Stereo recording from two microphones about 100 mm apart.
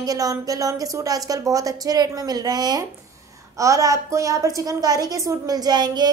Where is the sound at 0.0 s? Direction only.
35° right (ahead or behind).